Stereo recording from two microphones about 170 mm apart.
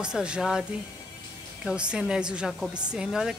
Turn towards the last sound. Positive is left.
turn(degrees=0)  # may be behind; listen again after turning